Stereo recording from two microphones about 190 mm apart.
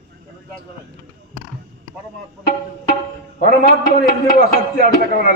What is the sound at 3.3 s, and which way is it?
A man's voice, 50° left (ahead or behind).